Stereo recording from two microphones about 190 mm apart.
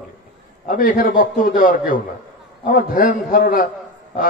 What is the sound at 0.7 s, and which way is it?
A man's voice, 45° left (ahead or behind).